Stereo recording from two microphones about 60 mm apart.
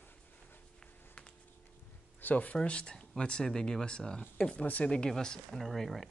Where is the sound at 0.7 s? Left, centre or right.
Centre.